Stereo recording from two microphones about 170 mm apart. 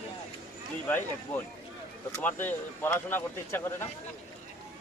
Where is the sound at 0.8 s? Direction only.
10° left (ahead or behind).